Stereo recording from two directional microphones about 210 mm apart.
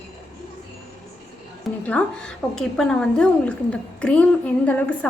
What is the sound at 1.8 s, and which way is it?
A woman's voice, 5° left (ahead or behind).